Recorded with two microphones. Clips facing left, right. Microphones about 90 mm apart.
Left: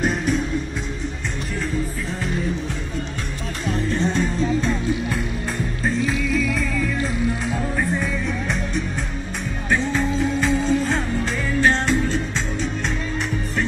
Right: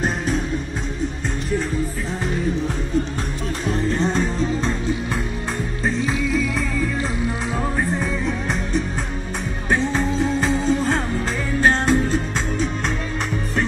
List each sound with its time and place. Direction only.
3.7 s music: 35° right (ahead or behind)
6.0 s music: 25° right (ahead or behind)
9.7 s music: 30° right (ahead or behind)
11.6 s music: 45° right (ahead or behind)